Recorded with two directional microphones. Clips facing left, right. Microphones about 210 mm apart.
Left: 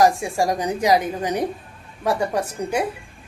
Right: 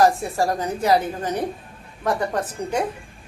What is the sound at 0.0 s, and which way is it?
A woman's voice, 15° left (ahead or behind).